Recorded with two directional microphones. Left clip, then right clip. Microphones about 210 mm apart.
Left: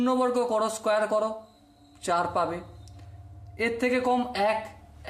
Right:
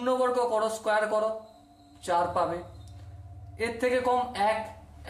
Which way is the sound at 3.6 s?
40° left (ahead or behind).